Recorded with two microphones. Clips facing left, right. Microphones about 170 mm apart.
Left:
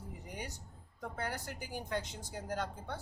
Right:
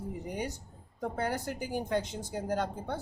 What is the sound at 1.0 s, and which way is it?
Speech, 30° right (ahead or behind).